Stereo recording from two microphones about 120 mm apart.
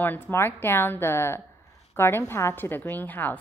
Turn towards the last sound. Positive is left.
turn(degrees=15)  # may be behind; listen again after turning